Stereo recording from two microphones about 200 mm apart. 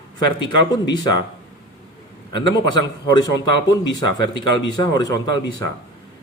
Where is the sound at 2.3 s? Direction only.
20° left (ahead or behind).